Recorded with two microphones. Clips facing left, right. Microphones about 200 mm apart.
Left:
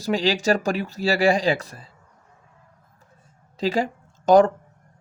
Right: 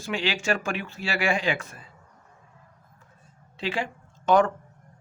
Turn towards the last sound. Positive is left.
turn(degrees=40)  # may be behind; listen again after turning